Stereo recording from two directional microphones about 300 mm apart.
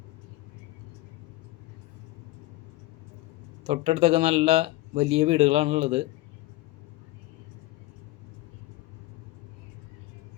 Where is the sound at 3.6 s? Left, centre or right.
Centre.